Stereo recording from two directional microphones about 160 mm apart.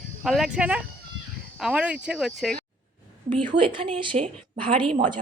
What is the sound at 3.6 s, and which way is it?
Speech, 35° right (ahead or behind).